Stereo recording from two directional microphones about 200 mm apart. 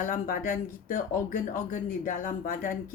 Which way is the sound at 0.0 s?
45° left (ahead or behind).